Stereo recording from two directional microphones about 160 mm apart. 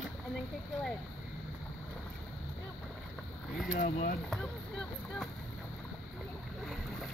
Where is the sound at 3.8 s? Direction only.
55° left (ahead or behind).